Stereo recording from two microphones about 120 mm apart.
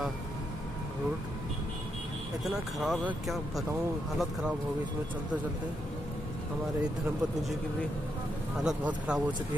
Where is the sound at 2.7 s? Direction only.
Centre (ahead or behind).